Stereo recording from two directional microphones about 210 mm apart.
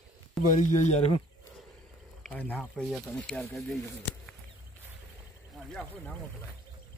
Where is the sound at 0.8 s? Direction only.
30° left (ahead or behind).